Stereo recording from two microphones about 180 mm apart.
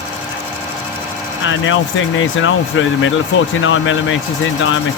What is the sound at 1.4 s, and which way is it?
Speech, 90° left.